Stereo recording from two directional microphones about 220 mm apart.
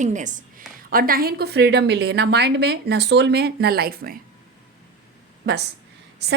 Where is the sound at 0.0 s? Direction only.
35° right (ahead or behind).